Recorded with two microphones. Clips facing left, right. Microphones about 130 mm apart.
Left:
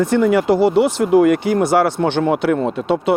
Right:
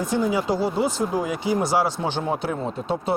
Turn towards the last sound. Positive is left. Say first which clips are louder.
# left 8 dB
turn(degrees=75)  # may be behind; listen again after turning